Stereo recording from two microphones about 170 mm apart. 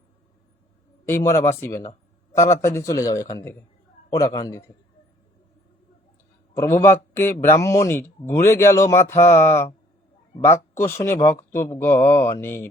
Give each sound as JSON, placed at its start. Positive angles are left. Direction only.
{"t": 1.0, "sound": "a man's voice", "side_deg": 15}
{"t": 6.5, "sound": "a man's voice", "side_deg": 15}